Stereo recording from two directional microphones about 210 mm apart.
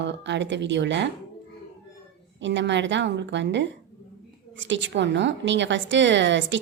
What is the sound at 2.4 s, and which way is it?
A woman's voice, 60° right (ahead or behind).